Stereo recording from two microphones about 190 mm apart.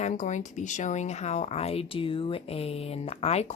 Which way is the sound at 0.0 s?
40° left (ahead or behind).